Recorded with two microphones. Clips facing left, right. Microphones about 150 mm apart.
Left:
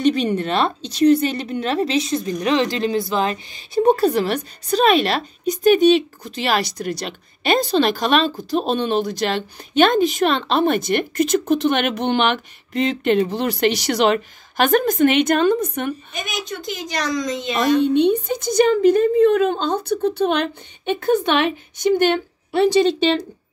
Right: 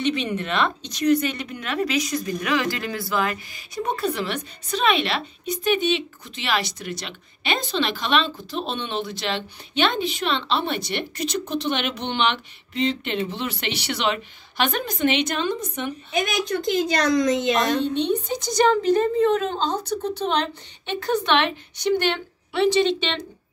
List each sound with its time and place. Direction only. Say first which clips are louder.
0.0 s speech: left 6 dB; 40° left (ahead or behind)
17.1 s a woman's voice: right 3 dB; 55° right (ahead or behind)
18.2 s a woman's voice: left 3 dB; 55° left (ahead or behind); by 23.2 s 40° left (ahead or behind)